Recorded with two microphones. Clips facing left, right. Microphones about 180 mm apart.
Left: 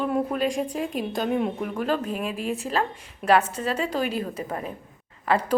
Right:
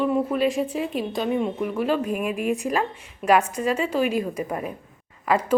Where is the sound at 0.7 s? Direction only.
45° left (ahead or behind).